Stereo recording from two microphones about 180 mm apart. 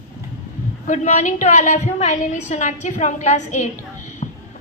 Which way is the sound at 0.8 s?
40° left (ahead or behind).